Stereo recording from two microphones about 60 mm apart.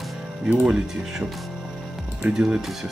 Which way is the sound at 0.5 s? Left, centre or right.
Centre.